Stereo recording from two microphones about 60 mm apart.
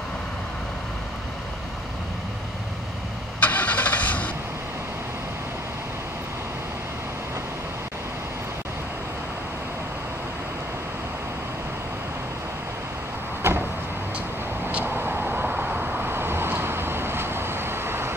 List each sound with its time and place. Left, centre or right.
3.3 s vehicle: left
13.4 s vehicle: right
14.9 s vehicle: right